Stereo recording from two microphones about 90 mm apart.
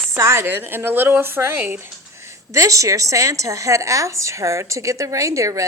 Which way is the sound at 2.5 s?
35° right (ahead or behind).